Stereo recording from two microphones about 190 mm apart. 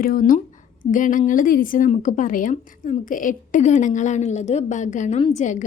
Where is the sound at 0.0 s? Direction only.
45° left (ahead or behind).